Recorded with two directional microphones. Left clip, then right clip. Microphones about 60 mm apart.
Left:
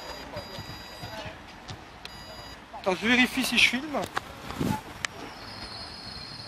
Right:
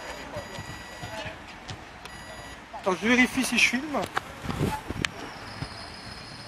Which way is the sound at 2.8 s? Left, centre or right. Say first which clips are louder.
Right 1 dB; left.